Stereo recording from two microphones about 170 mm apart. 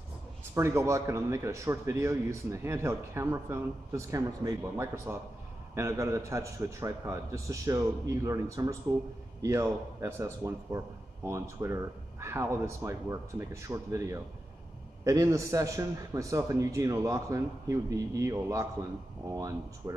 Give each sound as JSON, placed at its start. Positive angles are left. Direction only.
{"t": 0.6, "sound": "a man's voice", "side_deg": -15}